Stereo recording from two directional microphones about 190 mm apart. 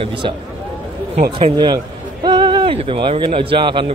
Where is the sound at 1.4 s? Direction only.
25° right (ahead or behind).